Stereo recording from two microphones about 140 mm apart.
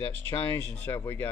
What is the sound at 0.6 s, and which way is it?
Speech, 15° left (ahead or behind).